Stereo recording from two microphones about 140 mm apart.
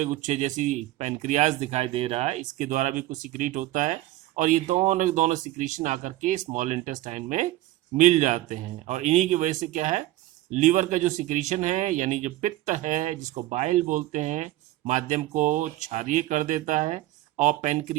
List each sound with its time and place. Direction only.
0.0 s speech: 55° right (ahead or behind)